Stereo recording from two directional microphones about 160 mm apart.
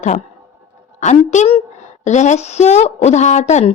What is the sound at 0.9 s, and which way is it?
A woman's voice, 45° left (ahead or behind).